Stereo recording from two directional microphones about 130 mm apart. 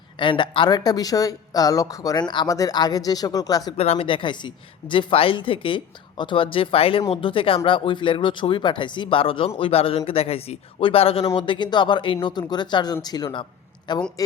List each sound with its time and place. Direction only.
0.2 s a woman's voice: 40° left (ahead or behind)
3.8 s a woman's voice: 50° left (ahead or behind); by 14.0 s 35° left (ahead or behind)